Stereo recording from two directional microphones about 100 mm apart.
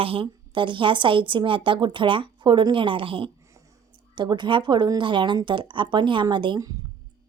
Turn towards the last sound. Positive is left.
turn(degrees=-50)  # may be behind; listen again after turning